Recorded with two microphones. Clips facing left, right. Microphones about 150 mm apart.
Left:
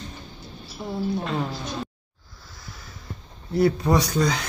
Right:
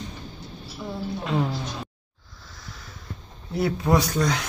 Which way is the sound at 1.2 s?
5° right (ahead or behind).